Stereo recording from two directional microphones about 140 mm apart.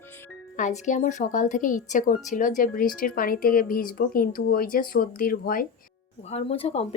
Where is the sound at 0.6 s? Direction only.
60° left (ahead or behind); by 5.6 s 90° left.